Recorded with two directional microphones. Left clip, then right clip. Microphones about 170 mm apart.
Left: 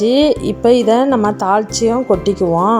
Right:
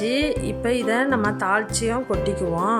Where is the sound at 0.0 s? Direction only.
20° left (ahead or behind).